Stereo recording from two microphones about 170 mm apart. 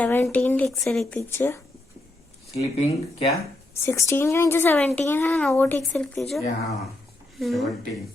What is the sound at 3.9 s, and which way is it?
A woman's voice, 15° left (ahead or behind).